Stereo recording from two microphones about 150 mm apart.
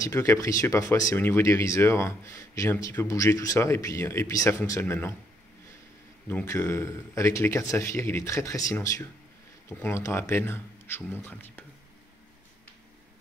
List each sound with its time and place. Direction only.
0.0 s speech: 20° left (ahead or behind)
6.4 s speech: 20° left (ahead or behind)